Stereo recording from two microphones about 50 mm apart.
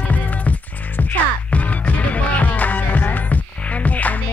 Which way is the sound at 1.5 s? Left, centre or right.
Left.